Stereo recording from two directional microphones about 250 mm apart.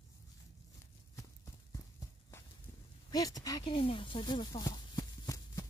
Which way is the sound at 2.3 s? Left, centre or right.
Centre.